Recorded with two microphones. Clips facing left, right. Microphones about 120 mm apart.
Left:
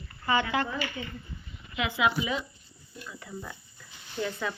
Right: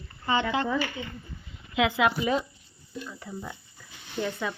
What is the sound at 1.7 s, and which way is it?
Speech, 80° right.